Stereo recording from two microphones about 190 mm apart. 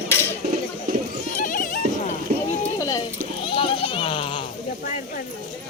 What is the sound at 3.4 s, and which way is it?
Children playing, 25° left (ahead or behind).